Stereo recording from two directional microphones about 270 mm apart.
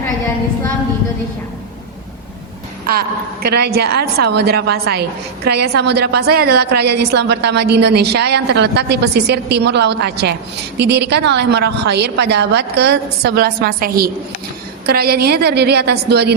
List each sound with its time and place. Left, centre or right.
3.4 s a woman's voice: right